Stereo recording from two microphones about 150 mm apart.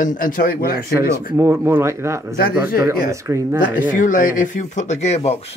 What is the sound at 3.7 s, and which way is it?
Speech, 60° left (ahead or behind).